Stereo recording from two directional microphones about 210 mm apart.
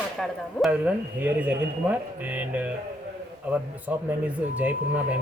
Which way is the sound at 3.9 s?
5° right (ahead or behind).